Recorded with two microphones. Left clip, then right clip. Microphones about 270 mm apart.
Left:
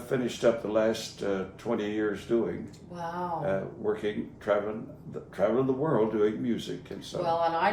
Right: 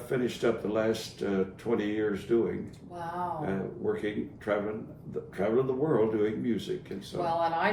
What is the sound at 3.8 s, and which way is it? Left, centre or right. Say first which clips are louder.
Speech: left 1 dB; centre.